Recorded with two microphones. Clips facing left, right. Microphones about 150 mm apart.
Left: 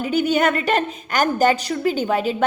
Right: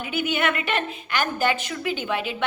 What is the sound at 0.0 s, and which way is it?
A woman's voice, 40° left (ahead or behind).